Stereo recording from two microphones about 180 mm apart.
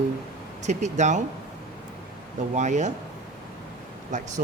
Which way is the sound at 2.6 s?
40° right (ahead or behind).